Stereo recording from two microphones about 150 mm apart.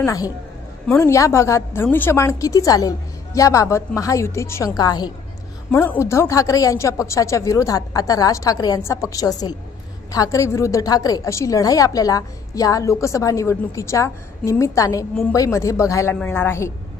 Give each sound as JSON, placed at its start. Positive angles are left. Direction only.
{"t": 0.0, "sound": "a woman's voice", "side_deg": 20}